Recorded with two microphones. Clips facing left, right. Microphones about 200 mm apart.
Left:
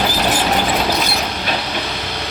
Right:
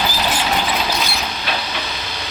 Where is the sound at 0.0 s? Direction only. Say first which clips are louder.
Left 3 dB; 50° left (ahead or behind).